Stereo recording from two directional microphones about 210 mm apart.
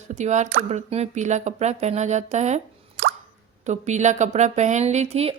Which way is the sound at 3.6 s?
35° right (ahead or behind).